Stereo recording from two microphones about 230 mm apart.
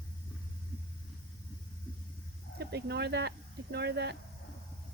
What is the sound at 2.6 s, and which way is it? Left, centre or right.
Speech, right.